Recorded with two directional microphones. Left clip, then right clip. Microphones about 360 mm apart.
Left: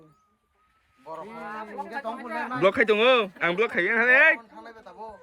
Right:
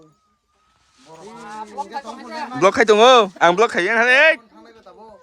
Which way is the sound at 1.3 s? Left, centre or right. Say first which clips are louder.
Right 8 dB; centre.